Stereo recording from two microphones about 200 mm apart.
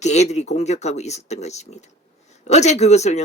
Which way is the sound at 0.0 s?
35° left (ahead or behind).